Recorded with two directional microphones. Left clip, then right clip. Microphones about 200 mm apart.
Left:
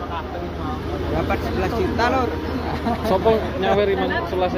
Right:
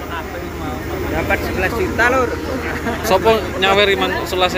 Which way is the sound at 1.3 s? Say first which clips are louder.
Right 5 dB; 55° left (ahead or behind).